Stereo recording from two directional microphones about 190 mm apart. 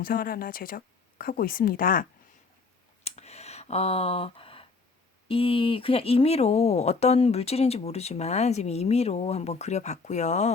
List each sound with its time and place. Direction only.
0.0 s speech: 50° left (ahead or behind)
3.0 s a sound: 35° left (ahead or behind)
5.3 s speech: 30° left (ahead or behind)